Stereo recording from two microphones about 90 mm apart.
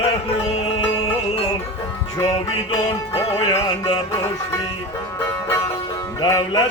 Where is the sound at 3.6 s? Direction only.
55° left (ahead or behind).